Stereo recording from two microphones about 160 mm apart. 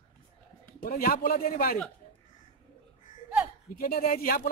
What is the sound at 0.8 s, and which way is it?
Speech, 65° left (ahead or behind).